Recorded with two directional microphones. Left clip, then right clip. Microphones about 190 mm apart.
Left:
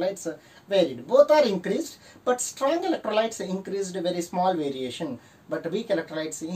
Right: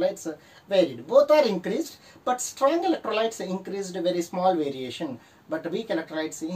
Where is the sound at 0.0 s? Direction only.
10° left (ahead or behind).